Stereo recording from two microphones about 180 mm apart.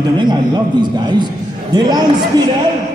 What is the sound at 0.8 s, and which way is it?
Speech, 25° right (ahead or behind).